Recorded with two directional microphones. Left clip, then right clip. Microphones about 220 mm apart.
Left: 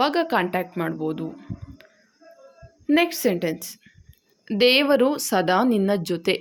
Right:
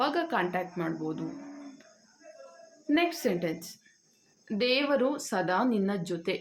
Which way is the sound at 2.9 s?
40° left (ahead or behind).